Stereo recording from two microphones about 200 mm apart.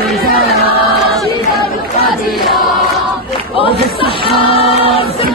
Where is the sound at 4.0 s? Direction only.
25° left (ahead or behind).